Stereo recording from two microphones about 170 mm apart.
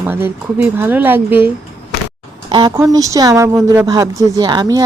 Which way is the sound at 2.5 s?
25° right (ahead or behind).